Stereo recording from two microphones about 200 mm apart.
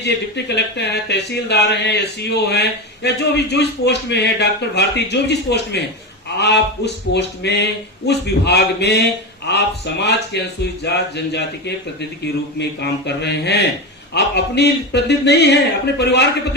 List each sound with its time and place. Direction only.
0.0 s speech: 55° left (ahead or behind)